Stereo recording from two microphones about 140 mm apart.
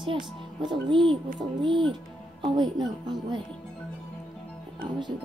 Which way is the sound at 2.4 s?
35° right (ahead or behind).